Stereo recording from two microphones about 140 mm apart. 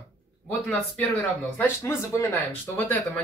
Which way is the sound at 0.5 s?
10° left (ahead or behind).